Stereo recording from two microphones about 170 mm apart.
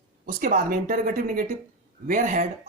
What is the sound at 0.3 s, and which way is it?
Speech, 55° right (ahead or behind).